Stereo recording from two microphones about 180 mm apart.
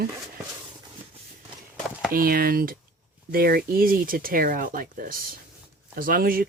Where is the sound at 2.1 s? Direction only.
55° right (ahead or behind).